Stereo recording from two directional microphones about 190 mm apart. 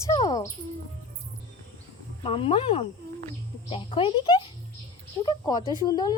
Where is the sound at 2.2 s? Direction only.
30° left (ahead or behind).